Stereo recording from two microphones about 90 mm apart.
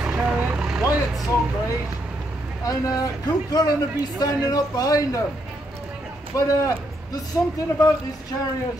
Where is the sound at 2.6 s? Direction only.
40° left (ahead or behind).